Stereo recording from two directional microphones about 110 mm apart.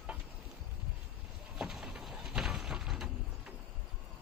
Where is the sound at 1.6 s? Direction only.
5° right (ahead or behind).